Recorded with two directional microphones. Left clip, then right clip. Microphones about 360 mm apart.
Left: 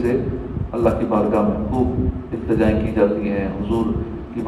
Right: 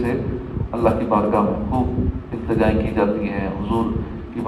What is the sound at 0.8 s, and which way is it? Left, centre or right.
A man's voice, centre.